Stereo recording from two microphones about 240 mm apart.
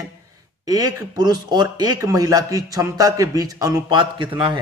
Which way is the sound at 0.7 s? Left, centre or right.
Centre.